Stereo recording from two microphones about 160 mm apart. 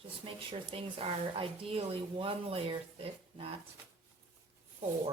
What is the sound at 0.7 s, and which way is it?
Speech, 35° right (ahead or behind).